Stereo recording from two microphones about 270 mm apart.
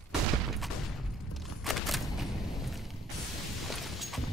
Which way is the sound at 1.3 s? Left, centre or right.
Centre.